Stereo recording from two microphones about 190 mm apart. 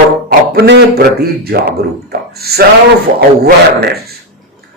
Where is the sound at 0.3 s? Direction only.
55° right (ahead or behind).